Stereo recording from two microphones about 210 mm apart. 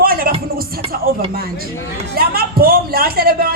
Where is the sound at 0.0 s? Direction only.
45° right (ahead or behind).